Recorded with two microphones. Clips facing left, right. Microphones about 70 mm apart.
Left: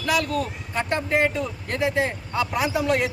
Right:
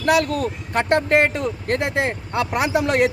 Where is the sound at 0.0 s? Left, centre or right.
Right.